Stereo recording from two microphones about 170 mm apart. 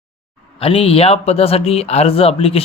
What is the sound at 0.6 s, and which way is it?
Speech, 35° left (ahead or behind).